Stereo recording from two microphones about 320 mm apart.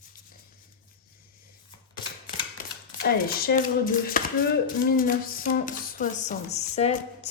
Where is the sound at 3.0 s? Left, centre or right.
Left.